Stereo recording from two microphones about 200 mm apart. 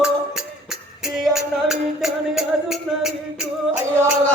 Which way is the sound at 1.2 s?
Centre (ahead or behind).